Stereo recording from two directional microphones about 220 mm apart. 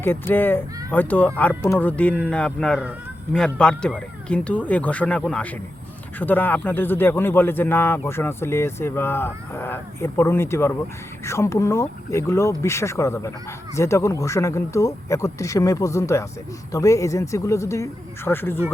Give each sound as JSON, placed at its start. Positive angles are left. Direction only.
{"t": 0.0, "sound": "a man's voice", "side_deg": 10}